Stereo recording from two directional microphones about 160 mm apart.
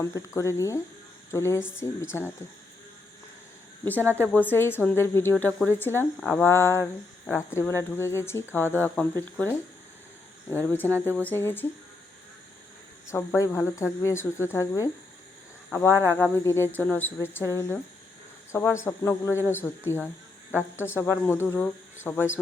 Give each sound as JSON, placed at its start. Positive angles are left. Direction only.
{"t": 0.0, "sound": "speech", "side_deg": 20}
{"t": 3.8, "sound": "speech", "side_deg": 10}
{"t": 13.1, "sound": "speech", "side_deg": 20}
{"t": 16.0, "sound": "speech", "side_deg": 10}